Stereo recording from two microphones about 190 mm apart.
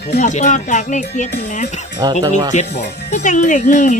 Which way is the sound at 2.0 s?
20° right (ahead or behind).